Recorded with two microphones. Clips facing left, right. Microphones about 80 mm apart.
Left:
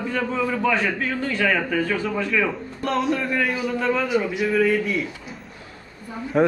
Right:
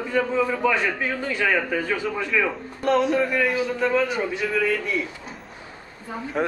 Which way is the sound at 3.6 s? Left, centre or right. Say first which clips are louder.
Right 1 dB; right.